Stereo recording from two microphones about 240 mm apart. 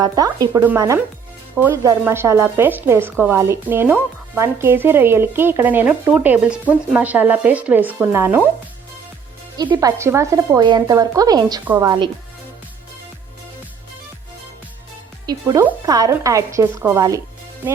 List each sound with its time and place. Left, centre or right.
0.0 s speech: centre
9.6 s speech: centre
15.3 s speech: centre